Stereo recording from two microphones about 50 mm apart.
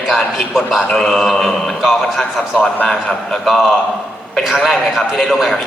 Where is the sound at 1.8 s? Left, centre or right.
Centre.